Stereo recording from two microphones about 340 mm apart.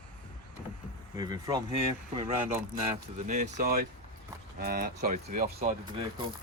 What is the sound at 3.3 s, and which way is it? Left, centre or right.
Speech, right.